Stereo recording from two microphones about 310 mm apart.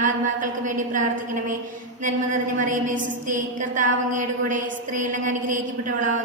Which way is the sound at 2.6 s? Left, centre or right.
Right.